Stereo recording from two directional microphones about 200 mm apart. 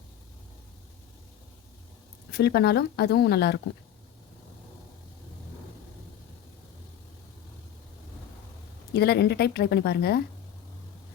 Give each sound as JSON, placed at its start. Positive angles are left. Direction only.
{"t": 2.3, "sound": "speech", "side_deg": 55}
{"t": 8.9, "sound": "speech", "side_deg": 55}